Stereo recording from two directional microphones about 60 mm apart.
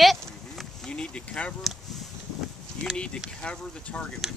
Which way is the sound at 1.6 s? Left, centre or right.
Centre.